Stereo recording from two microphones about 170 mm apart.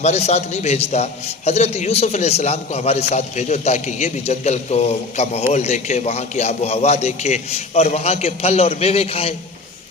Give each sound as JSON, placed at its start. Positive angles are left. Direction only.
{"t": 0.0, "sound": "a man's voice", "side_deg": 40}